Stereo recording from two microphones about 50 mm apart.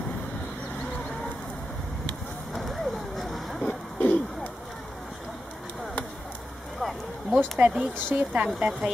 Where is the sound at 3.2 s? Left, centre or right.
Centre.